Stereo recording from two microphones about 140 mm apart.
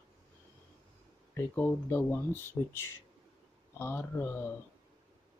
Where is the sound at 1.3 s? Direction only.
15° left (ahead or behind).